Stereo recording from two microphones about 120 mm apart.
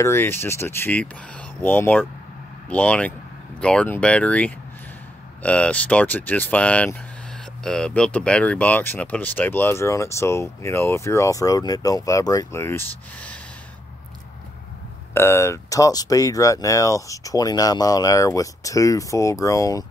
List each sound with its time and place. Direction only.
0.0 s speech: 20° left (ahead or behind)
15.1 s speech: 20° left (ahead or behind)